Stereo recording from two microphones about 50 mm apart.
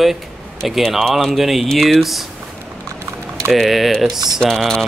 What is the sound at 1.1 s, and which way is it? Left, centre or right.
Speech, centre.